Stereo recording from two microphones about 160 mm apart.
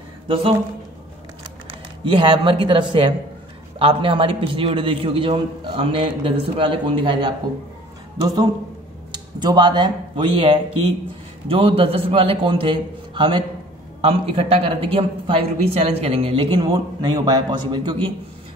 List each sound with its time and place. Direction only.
0.3 s a man's voice: 35° right (ahead or behind)
2.0 s a man's voice: 30° right (ahead or behind)
9.1 s a man's voice: 25° right (ahead or behind)